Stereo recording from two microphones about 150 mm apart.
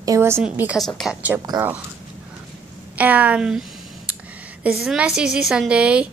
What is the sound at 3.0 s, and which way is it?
Speech, 10° right (ahead or behind).